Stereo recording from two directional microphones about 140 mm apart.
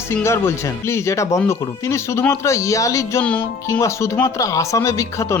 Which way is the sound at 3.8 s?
20° left (ahead or behind).